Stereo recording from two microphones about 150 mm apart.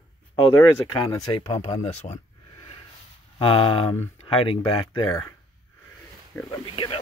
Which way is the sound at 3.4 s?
35° left (ahead or behind).